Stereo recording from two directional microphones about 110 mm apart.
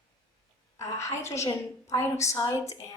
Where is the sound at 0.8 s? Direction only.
25° left (ahead or behind).